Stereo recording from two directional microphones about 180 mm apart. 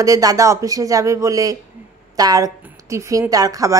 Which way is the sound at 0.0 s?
20° right (ahead or behind).